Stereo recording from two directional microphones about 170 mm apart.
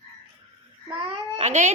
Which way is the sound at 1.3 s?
40° right (ahead or behind).